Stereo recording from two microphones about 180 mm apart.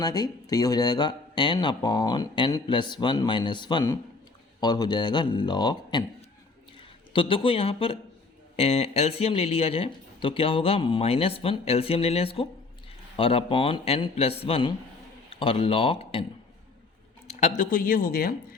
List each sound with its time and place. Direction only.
0.0 s speech: 20° left (ahead or behind)
7.1 s speech: 30° left (ahead or behind)
17.6 s speech: 50° left (ahead or behind)